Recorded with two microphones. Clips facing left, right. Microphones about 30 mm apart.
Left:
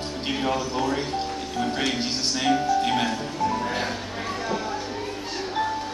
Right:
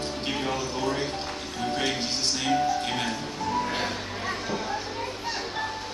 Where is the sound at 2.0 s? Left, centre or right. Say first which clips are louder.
Left 3 dB; centre.